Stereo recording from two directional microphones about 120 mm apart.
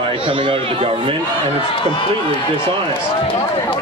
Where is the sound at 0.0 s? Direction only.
50° right (ahead or behind).